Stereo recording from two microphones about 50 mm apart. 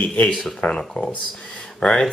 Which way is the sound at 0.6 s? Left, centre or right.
Centre.